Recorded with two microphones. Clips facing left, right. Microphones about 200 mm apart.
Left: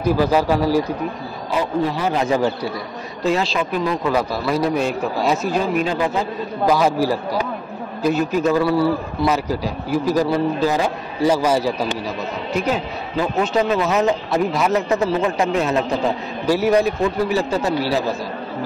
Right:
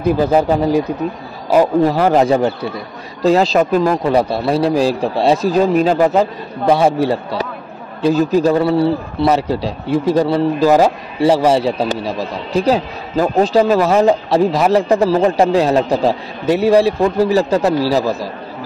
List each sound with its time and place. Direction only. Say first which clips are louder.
0.5 s a man's voice: right 3 dB; 20° right (ahead or behind)
1.5 s speech: right 9 dB; 45° right (ahead or behind)
2.2 s a man's voice: right 4 dB; 30° right (ahead or behind)
3.3 s speech: right 8 dB; 40° right (ahead or behind)
4.0 s speech: right 5 dB; 30° right (ahead or behind)
6.6 s a man's voice: right 4 dB; 30° right (ahead or behind)